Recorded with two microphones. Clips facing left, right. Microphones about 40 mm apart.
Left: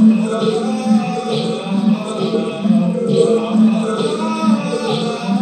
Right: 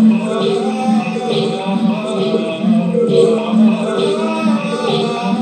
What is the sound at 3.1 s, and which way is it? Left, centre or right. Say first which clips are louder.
Music: right 1 dB; right.